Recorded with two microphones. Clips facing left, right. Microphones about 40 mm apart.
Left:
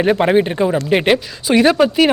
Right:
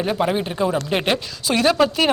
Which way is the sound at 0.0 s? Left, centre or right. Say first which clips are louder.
Left 6 dB; left.